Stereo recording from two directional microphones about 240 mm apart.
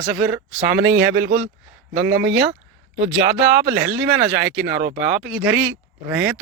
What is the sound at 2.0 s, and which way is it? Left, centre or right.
Speech, right.